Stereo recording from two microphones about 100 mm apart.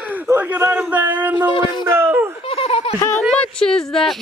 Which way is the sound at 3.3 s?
10° left (ahead or behind).